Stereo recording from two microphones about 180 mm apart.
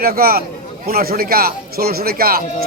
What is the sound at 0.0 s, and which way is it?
Speech, 55° right (ahead or behind).